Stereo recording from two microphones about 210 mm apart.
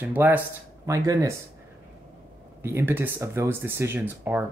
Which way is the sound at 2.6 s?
10° right (ahead or behind).